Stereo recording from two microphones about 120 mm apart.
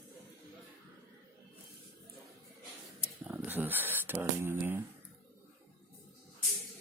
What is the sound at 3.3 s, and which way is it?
Speech, 15° right (ahead or behind).